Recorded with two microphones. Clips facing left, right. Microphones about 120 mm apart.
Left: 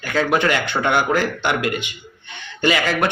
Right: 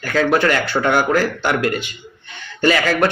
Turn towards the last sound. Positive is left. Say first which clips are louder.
# right 3 dB
turn(degrees=15)  # may be behind; listen again after turning